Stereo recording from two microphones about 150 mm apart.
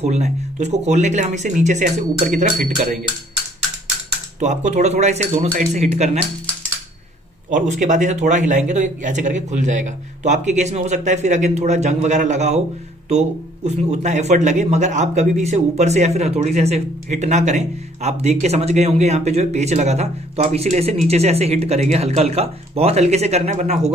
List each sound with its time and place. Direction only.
0.0 s speech: 50° right (ahead or behind)
4.4 s speech: 50° right (ahead or behind)
7.5 s speech: 55° right (ahead or behind)